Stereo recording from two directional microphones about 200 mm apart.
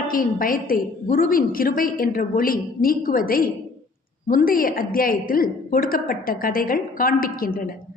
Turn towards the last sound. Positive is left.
turn(degrees=45)  # may be behind; listen again after turning